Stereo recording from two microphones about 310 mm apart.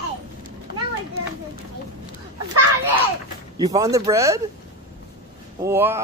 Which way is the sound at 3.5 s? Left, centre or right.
Centre.